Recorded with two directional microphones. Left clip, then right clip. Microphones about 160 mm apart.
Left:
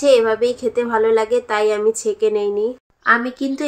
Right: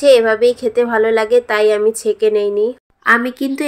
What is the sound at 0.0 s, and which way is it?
A woman's voice, 15° right (ahead or behind).